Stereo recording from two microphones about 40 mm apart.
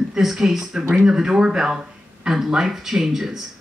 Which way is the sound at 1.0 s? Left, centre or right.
Centre.